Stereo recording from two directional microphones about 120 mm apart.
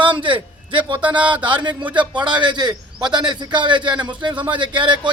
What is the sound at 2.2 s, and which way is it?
A man's voice, 40° right (ahead or behind).